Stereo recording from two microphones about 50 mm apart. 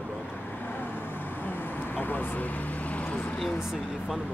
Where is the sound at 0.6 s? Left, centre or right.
Left.